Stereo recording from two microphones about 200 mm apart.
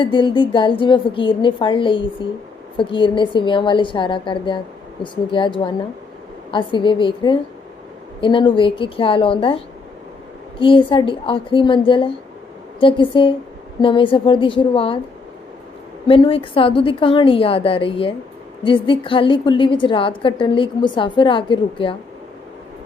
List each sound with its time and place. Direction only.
0.0 s a woman's voice: 25° left (ahead or behind)
16.0 s a woman's voice: 25° left (ahead or behind)